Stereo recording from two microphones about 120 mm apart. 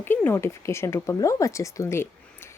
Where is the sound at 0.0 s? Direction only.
15° left (ahead or behind).